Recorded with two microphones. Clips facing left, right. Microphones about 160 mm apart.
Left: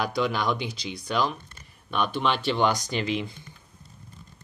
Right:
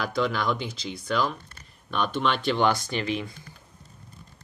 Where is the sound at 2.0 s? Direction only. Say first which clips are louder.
Right 1 dB; 5° left (ahead or behind).